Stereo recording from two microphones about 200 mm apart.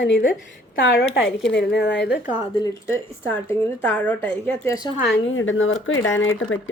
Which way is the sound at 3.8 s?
10° left (ahead or behind).